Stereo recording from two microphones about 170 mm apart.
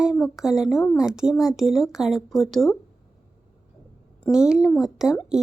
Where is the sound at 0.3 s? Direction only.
Centre (ahead or behind).